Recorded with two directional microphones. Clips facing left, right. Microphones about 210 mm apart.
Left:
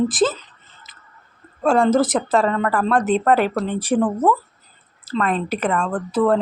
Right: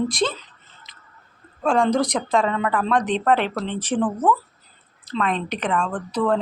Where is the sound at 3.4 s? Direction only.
45° left (ahead or behind).